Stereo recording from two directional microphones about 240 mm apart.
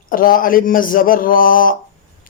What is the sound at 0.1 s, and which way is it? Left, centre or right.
Mantra, left.